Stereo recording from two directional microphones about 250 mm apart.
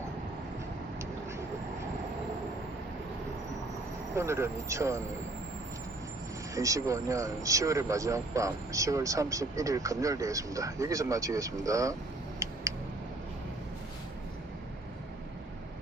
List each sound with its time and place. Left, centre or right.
4.1 s speech: centre
6.5 s speech: centre